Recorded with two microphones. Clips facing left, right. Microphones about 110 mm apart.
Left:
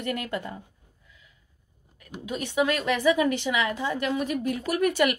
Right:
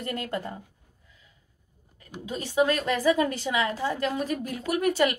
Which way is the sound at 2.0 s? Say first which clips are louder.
Left 2 dB; 30° right (ahead or behind).